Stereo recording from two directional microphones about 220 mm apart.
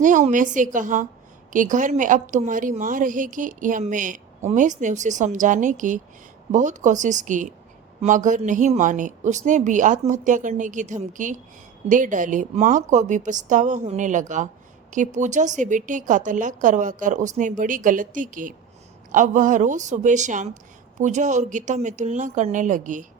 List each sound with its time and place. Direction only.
0.0 s a woman's voice: 35° right (ahead or behind)